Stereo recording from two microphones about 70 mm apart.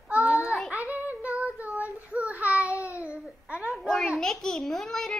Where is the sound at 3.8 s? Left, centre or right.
Centre.